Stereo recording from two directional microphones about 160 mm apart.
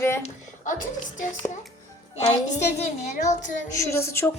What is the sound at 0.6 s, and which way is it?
Speech, 55° left (ahead or behind).